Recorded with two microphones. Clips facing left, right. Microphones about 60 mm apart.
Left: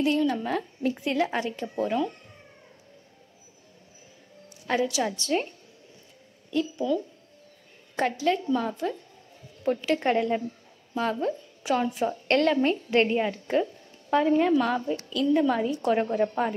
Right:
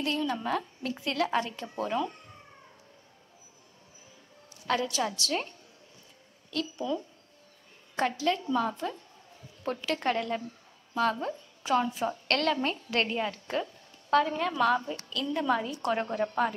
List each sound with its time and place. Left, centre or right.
0.0 s a woman's voice: centre
0.9 s speech: centre
4.7 s a woman's voice: centre
5.1 s a woman's voice: left
6.5 s speech: centre
7.9 s a woman's voice: centre
11.0 s a woman's voice: centre